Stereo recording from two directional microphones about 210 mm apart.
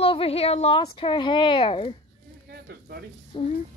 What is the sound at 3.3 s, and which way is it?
Speech, 25° left (ahead or behind).